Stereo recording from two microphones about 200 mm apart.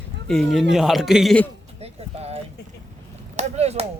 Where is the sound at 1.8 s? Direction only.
30° right (ahead or behind).